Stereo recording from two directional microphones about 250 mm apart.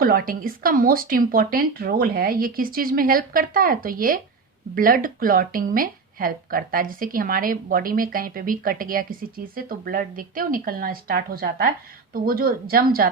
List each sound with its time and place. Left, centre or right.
0.0 s speech: right